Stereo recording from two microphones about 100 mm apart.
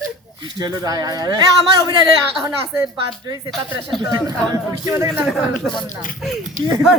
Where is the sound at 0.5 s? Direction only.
40° right (ahead or behind).